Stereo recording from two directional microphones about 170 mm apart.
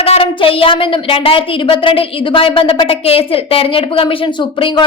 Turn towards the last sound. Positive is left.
turn(degrees=30)  # may be behind; listen again after turning